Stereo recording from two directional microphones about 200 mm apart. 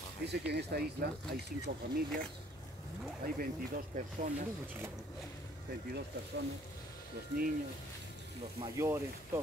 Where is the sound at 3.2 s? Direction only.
50° right (ahead or behind).